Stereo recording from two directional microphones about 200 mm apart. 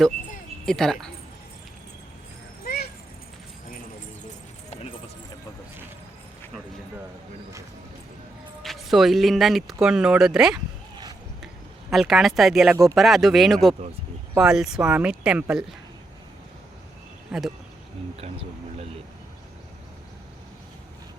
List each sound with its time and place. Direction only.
0.6 s speech: centre (ahead or behind)
2.6 s a sound: 50° left (ahead or behind)
4.7 s clip-clop: 30° left (ahead or behind)
8.6 s speech: centre (ahead or behind)
11.9 s speech: centre (ahead or behind)
17.3 s speech: 5° right (ahead or behind)
18.2 s speech: 30° right (ahead or behind)